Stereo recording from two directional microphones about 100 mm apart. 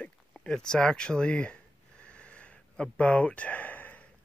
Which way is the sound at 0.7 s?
5° left (ahead or behind).